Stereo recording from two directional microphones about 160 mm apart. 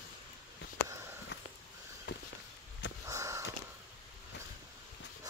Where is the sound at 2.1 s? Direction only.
90° left.